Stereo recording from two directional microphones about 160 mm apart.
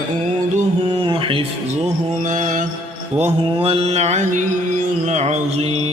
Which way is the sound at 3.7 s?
40° right (ahead or behind).